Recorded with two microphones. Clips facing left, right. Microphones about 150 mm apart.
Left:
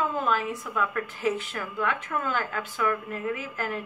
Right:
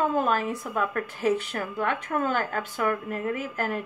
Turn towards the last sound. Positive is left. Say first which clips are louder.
# right 2 dB
turn(degrees=-50)  # may be behind; listen again after turning